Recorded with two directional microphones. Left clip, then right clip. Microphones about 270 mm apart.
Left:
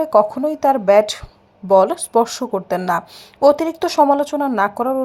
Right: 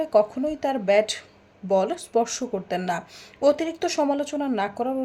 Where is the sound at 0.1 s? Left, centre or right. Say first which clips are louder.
Left 5 dB; centre.